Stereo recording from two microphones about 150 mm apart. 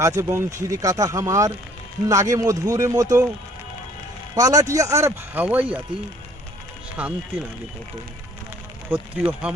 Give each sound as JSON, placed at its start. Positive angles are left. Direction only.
{"t": 0.2, "sound": "speech", "side_deg": -20}
{"t": 4.4, "sound": "speech", "side_deg": -25}
{"t": 7.0, "sound": "speech", "side_deg": -10}
{"t": 8.9, "sound": "speech", "side_deg": -10}